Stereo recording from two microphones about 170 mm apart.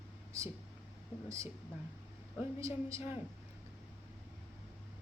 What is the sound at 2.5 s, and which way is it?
Speech, 20° right (ahead or behind).